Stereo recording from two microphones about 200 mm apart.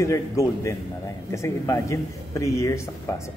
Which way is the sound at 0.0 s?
15° left (ahead or behind).